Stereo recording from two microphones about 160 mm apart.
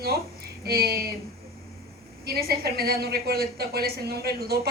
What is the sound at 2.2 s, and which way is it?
A woman's voice, 75° right (ahead or behind).